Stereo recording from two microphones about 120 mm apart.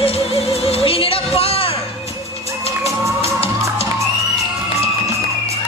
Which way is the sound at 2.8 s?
25° right (ahead or behind).